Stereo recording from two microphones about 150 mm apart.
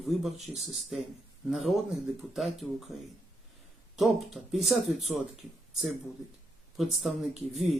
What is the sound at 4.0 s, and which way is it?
Speech, centre (ahead or behind).